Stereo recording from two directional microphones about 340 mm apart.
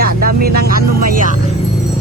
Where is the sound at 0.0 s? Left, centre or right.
Right.